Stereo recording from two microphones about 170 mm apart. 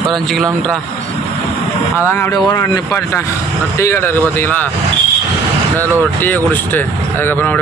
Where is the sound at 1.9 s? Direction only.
15° left (ahead or behind).